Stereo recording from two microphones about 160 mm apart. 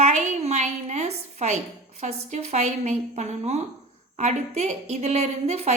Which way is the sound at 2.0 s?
45° right (ahead or behind).